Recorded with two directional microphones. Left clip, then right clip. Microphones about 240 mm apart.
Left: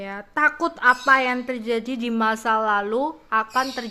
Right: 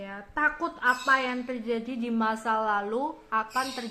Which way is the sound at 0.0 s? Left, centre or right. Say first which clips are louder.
Left 7 dB; left.